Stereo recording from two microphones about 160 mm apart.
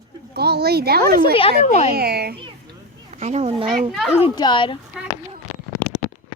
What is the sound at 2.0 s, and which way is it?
Speech, 80° right.